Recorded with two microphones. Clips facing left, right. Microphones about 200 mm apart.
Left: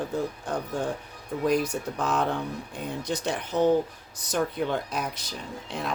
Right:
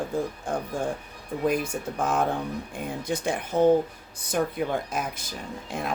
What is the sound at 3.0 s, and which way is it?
Speech, 55° right (ahead or behind).